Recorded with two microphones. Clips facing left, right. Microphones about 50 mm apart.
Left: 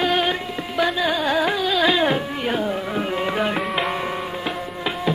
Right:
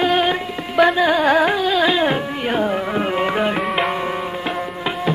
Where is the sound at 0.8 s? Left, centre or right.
Right.